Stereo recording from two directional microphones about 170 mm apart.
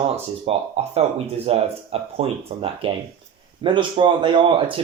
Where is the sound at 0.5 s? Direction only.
35° right (ahead or behind).